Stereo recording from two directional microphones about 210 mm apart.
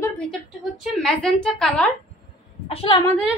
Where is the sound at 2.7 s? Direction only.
25° left (ahead or behind).